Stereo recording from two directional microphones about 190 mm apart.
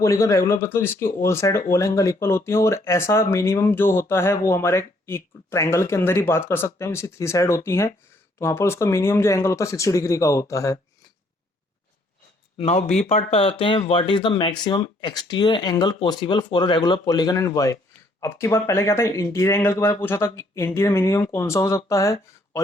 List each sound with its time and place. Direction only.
0.0 s speech: 15° left (ahead or behind)
12.5 s speech: 35° left (ahead or behind); by 22.6 s 15° left (ahead or behind)